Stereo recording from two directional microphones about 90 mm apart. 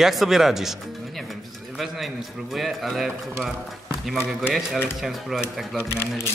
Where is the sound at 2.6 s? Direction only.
Centre (ahead or behind).